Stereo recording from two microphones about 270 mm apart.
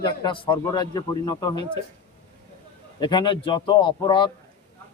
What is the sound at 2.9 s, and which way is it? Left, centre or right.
Speech, centre.